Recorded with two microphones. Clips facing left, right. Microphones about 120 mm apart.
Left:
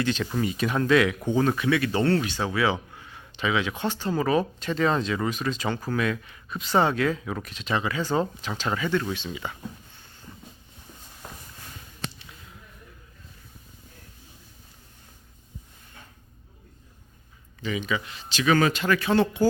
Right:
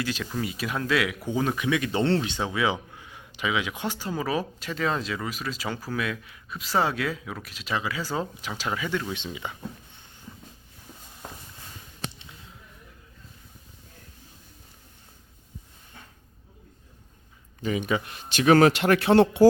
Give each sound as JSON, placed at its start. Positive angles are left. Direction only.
{"t": 0.0, "sound": "speech", "side_deg": -5}
{"t": 9.1, "sound": "speech", "side_deg": -20}
{"t": 17.6, "sound": "speech", "side_deg": -50}